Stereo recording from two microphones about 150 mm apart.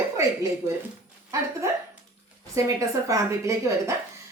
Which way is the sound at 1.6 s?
20° right (ahead or behind).